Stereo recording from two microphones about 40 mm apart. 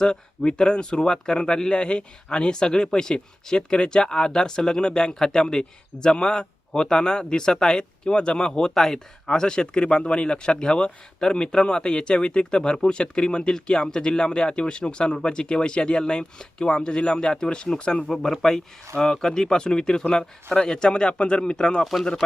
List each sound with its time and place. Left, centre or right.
0.0 s speech: centre
18.1 s speech: centre